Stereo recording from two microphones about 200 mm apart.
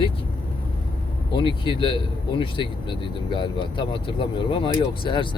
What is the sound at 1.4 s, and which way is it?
Speech, 25° left (ahead or behind).